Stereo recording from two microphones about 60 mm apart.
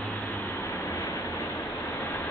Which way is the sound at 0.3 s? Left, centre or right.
Left.